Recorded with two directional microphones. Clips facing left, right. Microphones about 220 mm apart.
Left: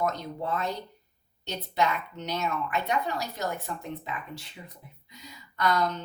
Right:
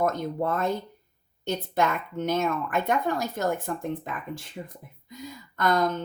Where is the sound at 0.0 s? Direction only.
50° right (ahead or behind).